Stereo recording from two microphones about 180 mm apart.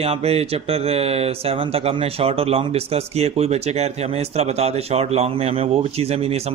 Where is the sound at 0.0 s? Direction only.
35° right (ahead or behind).